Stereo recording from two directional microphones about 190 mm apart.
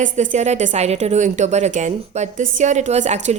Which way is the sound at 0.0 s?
40° right (ahead or behind).